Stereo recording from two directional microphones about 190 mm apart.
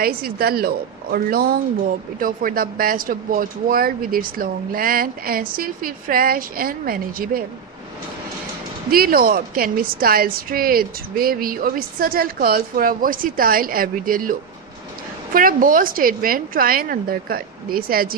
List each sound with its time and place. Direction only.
0.0 s a woman's voice: 50° right (ahead or behind)
8.9 s a woman's voice: 50° right (ahead or behind)